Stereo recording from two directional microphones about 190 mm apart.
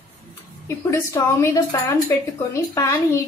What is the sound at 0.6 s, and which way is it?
A woman's voice, 15° left (ahead or behind).